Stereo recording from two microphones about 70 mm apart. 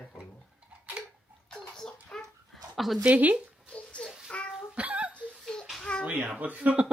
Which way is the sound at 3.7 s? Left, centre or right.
Centre.